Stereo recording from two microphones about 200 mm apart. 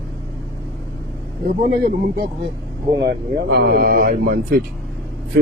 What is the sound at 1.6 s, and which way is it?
A man's voice, 50° right (ahead or behind).